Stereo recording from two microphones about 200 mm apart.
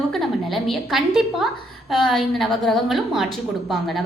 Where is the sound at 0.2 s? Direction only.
Centre (ahead or behind).